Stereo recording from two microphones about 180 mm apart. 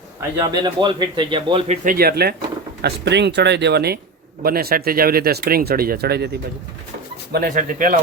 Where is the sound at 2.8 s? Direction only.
70° right (ahead or behind).